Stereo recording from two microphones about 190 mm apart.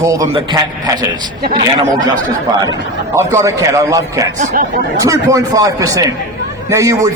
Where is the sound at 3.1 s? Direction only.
15° right (ahead or behind).